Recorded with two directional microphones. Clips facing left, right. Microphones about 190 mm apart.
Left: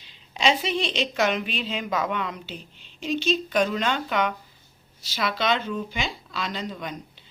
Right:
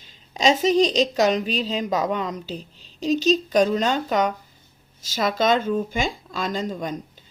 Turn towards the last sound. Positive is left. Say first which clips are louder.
# right 6 dB
turn(degrees=-45)  # may be behind; listen again after turning